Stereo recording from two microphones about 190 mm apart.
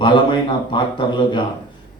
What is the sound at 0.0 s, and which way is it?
A man's voice, 25° left (ahead or behind).